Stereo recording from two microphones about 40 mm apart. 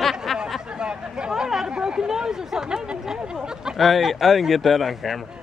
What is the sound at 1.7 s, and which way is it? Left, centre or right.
Chatter, centre.